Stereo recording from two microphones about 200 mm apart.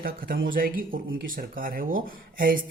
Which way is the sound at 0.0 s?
45° right (ahead or behind).